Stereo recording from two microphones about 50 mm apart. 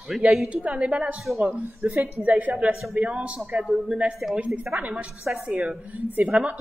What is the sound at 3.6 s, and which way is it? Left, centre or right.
Speech, centre.